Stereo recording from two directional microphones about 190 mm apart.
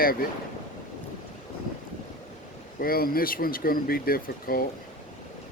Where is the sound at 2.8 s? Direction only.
50° left (ahead or behind).